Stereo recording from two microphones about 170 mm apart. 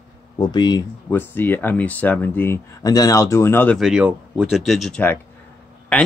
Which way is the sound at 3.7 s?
5° right (ahead or behind).